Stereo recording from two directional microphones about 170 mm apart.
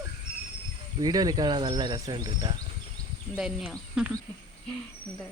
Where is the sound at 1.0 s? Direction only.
20° right (ahead or behind).